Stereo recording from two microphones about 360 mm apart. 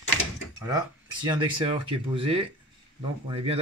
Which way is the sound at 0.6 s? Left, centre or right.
Centre.